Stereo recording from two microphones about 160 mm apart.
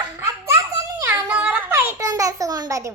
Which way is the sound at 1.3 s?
10° right (ahead or behind).